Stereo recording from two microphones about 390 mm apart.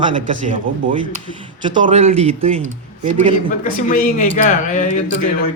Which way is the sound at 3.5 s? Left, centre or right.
Centre.